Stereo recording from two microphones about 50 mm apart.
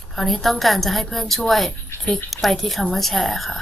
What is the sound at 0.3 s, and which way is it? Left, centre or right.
A woman's voice, centre.